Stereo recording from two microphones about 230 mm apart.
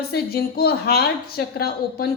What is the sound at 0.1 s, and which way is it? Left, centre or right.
A woman's voice, left.